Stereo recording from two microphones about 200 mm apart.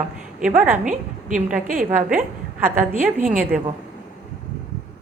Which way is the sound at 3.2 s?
45° right (ahead or behind).